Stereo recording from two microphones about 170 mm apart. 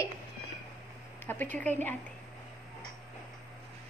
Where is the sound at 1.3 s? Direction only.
10° left (ahead or behind).